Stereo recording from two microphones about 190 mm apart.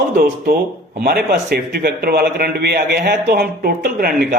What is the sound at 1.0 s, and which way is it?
Speech, 55° right (ahead or behind).